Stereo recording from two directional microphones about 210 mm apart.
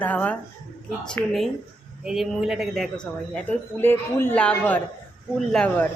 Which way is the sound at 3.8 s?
10° left (ahead or behind).